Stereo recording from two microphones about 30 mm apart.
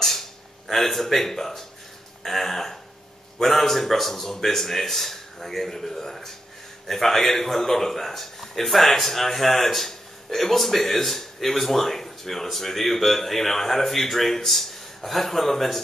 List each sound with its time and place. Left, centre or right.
0.7 s speech: centre